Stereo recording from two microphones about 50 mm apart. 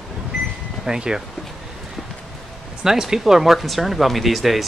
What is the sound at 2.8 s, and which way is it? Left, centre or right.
Speech, centre.